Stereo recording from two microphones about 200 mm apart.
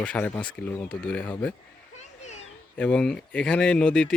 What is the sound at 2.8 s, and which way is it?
Speech, 5° left (ahead or behind).